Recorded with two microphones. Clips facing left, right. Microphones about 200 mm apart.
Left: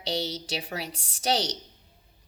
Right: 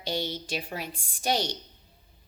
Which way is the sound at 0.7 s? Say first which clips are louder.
Left 1 dB; 80° left.